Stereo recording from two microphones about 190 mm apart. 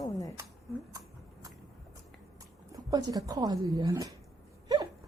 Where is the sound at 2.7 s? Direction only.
20° right (ahead or behind).